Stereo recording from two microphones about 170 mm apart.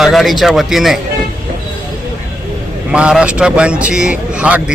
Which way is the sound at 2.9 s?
5° right (ahead or behind).